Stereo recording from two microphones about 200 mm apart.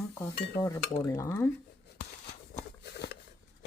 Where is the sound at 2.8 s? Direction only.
55° left (ahead or behind).